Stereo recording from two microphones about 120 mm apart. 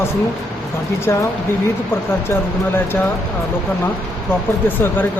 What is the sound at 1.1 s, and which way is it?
Speech, 20° left (ahead or behind).